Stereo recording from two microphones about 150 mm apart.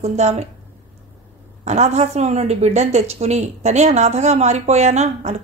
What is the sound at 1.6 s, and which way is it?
A woman's voice, 50° right (ahead or behind).